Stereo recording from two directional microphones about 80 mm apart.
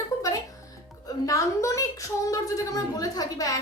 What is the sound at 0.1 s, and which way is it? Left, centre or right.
Music, left.